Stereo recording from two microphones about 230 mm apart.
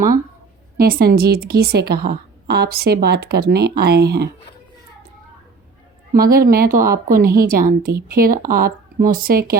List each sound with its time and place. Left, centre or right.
0.8 s a woman's voice: right
6.1 s a woman's voice: right